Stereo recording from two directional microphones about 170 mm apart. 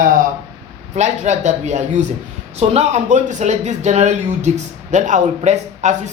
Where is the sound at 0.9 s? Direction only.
45° right (ahead or behind).